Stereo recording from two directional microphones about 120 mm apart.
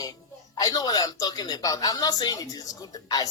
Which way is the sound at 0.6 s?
35° left (ahead or behind).